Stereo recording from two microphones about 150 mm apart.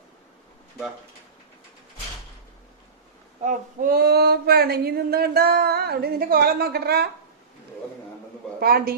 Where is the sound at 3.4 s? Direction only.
60° right (ahead or behind); by 7.1 s 90° right.